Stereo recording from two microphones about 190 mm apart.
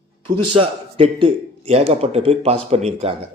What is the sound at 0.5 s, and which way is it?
A man's voice, 30° right (ahead or behind).